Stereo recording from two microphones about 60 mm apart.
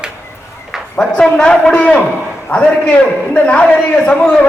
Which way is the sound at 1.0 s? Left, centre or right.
Centre.